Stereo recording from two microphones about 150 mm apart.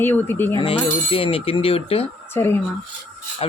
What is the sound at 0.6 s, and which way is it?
Speech, 40° left (ahead or behind).